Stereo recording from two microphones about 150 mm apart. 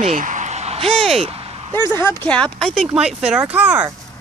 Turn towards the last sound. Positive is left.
turn(degrees=-10)  # may be behind; listen again after turning